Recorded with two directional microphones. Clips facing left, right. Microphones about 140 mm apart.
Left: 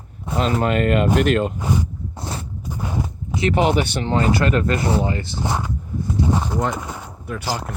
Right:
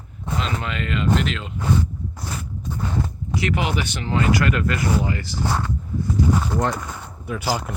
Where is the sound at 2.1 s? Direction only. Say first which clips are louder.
Left 4 dB; 25° left (ahead or behind).